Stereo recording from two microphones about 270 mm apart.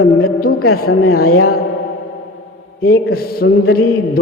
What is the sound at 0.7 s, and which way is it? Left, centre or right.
Mantra, left.